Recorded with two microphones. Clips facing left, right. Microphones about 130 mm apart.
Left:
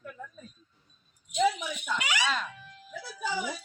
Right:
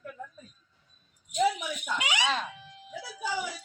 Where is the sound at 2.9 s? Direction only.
10° right (ahead or behind).